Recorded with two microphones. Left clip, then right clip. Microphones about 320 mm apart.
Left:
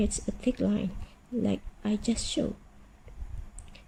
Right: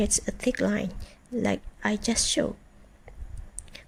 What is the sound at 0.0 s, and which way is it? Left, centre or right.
Speech, right.